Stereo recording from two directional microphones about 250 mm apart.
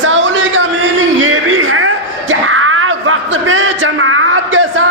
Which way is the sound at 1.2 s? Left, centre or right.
Right.